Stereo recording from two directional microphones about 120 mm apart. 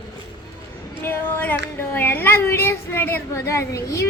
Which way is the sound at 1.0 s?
20° left (ahead or behind).